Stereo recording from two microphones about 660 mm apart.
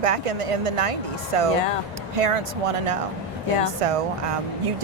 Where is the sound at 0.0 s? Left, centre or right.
Right.